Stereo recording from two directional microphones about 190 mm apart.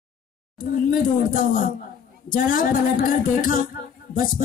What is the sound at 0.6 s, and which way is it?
A woman's voice, 45° left (ahead or behind).